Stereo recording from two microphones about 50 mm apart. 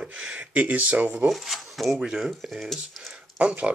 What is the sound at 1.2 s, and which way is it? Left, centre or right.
Speech, centre.